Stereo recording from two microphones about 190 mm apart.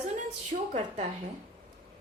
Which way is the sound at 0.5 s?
45° right (ahead or behind).